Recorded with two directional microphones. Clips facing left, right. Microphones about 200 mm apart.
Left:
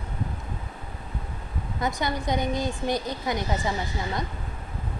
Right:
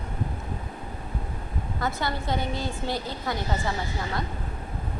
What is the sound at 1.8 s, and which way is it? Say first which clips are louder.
A woman's voice: left 2 dB; 15° left (ahead or behind).